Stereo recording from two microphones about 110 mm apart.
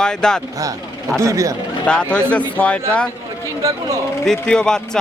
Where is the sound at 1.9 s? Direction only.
10° left (ahead or behind).